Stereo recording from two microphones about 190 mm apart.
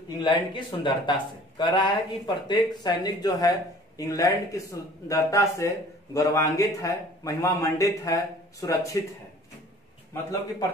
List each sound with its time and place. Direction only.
0.2 s a man's voice: 25° left (ahead or behind)